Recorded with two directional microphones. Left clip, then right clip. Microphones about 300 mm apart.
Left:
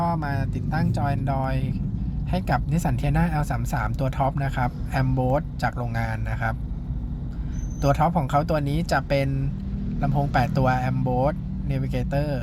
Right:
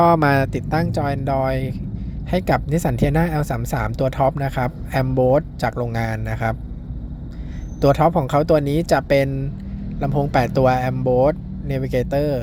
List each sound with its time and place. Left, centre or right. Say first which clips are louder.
0.0 s speech: right 12 dB; right
7.8 s speech: right 6 dB; centre